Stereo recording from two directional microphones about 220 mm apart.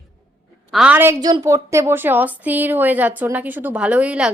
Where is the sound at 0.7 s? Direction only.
5° right (ahead or behind).